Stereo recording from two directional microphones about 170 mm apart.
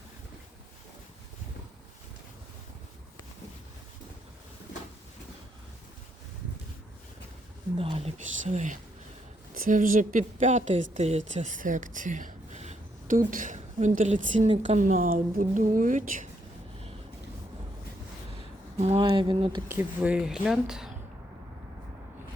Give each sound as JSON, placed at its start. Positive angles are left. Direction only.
{"t": 7.8, "sound": "speech", "side_deg": -35}
{"t": 18.8, "sound": "speech", "side_deg": -35}
{"t": 19.6, "sound": "speech", "side_deg": -10}